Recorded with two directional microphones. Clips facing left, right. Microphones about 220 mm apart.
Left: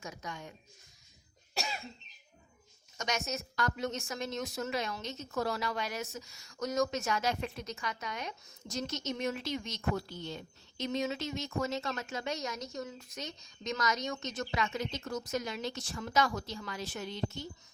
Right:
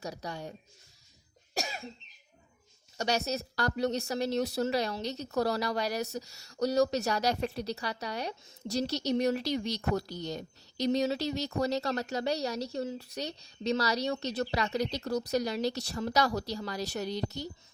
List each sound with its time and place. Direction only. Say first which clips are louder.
0.0 s a woman's voice: right 5 dB; 35° right (ahead or behind)
1.5 s cough: right 2 dB; 45° right (ahead or behind)
3.0 s a woman's voice: right 5 dB; 35° right (ahead or behind)